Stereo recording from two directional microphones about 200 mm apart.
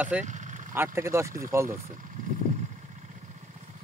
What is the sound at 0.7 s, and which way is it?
Speech, 10° right (ahead or behind).